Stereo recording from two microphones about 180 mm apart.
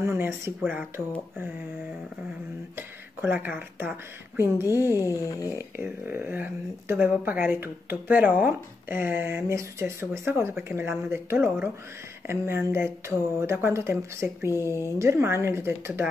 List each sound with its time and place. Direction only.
0.0 s speech: 15° right (ahead or behind)
2.7 s speech: 10° right (ahead or behind)
4.9 s a sound: 20° left (ahead or behind)
5.6 s speech: 10° right (ahead or behind)